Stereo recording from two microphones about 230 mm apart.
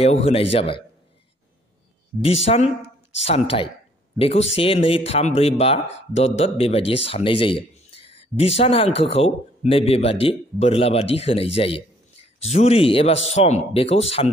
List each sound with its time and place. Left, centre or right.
0.0 s speech: left
2.2 s speech: left